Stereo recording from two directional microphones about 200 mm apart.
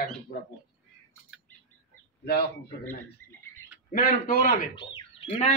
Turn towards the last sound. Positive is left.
turn(degrees=30)  # may be behind; listen again after turning